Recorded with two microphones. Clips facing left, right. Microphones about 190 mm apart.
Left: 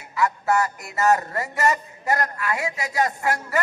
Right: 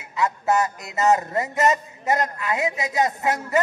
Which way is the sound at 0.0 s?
20° right (ahead or behind).